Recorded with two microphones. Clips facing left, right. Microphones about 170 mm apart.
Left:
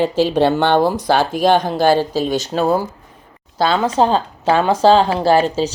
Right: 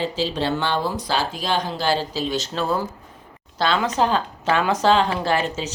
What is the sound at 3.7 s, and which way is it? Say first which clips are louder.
Speech: left 5 dB; 30° left (ahead or behind).